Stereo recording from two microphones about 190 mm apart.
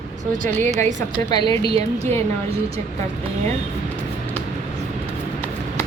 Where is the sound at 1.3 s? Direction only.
20° left (ahead or behind).